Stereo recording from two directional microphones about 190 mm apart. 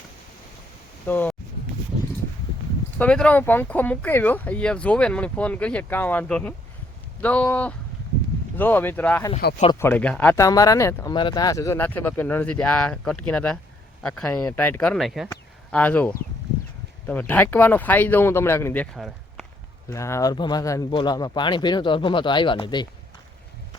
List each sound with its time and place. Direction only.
1.0 s speech: 10° left (ahead or behind)
3.0 s speech: 5° left (ahead or behind)
18.9 s a sound: centre (ahead or behind)
19.9 s speech: 15° left (ahead or behind)